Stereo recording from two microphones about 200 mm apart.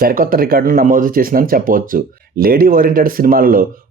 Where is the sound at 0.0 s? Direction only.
45° right (ahead or behind).